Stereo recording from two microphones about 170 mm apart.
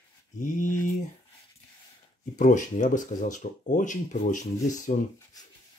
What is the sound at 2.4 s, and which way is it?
Speech, 45° left (ahead or behind).